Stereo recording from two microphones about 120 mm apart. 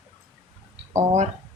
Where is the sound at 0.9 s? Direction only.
70° right (ahead or behind).